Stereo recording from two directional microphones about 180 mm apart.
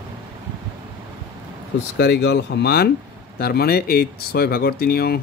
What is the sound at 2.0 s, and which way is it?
Speech, 70° left (ahead or behind).